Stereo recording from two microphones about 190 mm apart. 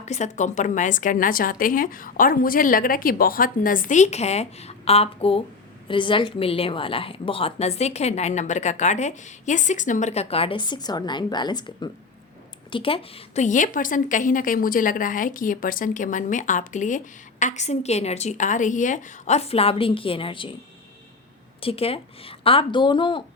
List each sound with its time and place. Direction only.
0.0 s a woman's voice: 35° left (ahead or behind)
21.6 s a woman's voice: 30° left (ahead or behind)